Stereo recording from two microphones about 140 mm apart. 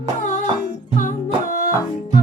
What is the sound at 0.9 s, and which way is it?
Music, 75° left (ahead or behind).